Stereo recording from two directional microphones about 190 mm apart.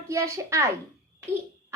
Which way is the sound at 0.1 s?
15° right (ahead or behind).